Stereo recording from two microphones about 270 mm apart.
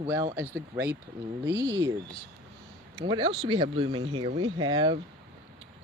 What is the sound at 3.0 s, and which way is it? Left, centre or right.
Speech, centre.